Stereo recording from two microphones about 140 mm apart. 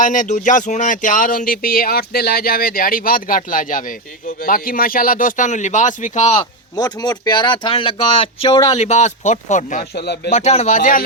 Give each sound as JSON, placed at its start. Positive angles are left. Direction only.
{"t": 0.0, "sound": "speech", "side_deg": 65}
{"t": 4.4, "sound": "speech", "side_deg": 90}
{"t": 6.7, "sound": "speech", "side_deg": 30}
{"t": 8.7, "sound": "speech", "side_deg": 50}
{"t": 10.8, "sound": "speech", "side_deg": 70}